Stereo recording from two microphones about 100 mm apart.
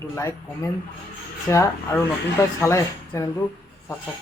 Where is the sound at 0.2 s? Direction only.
30° left (ahead or behind).